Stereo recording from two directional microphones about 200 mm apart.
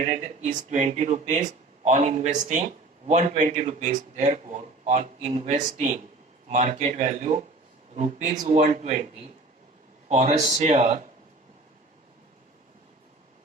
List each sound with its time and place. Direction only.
0.1 s a man's voice: 40° right (ahead or behind)
10.1 s a man's voice: 35° right (ahead or behind)